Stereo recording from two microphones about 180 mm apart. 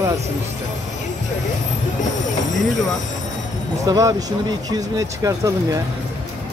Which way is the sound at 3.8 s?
20° right (ahead or behind).